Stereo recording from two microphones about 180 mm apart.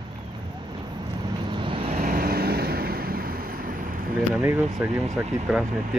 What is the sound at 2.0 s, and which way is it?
Vehicle, 55° right (ahead or behind).